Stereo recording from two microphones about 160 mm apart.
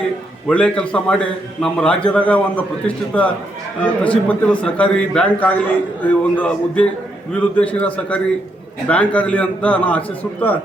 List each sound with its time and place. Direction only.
0.4 s a man's voice: 5° left (ahead or behind)